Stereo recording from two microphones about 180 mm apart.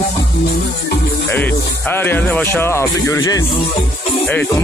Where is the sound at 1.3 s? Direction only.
10° left (ahead or behind).